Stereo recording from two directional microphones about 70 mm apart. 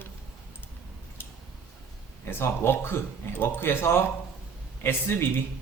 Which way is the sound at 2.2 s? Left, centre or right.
Left.